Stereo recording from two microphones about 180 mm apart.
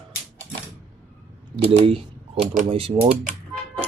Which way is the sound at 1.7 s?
30° right (ahead or behind).